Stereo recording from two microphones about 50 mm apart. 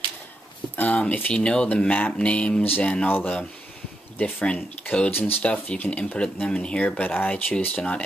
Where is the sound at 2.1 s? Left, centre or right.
Left.